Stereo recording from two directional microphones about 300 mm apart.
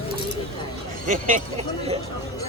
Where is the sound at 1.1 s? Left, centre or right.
Right.